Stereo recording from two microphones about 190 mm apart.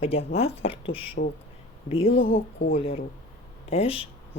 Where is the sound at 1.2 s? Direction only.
50° left (ahead or behind).